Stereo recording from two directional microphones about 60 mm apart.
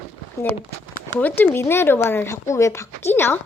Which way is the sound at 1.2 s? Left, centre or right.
Left.